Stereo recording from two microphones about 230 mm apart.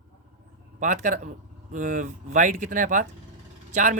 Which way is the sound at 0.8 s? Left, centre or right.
Right.